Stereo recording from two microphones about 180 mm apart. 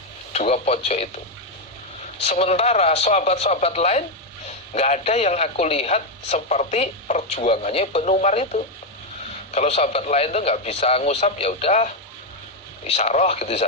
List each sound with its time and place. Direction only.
0.3 s a man's voice: 35° left (ahead or behind)
2.2 s a man's voice: 35° left (ahead or behind)
12.9 s a man's voice: 35° left (ahead or behind)